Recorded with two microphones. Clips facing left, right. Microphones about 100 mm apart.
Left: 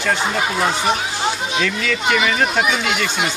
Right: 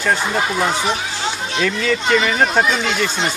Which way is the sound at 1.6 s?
35° right (ahead or behind).